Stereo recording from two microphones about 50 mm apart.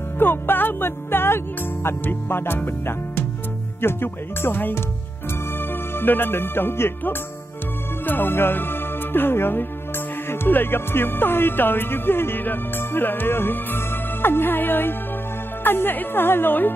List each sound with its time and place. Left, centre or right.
0.2 s music: left
3.8 s speech: left
5.9 s speech: left